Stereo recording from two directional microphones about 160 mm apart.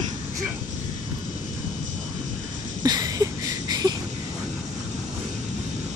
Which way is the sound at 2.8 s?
25° right (ahead or behind).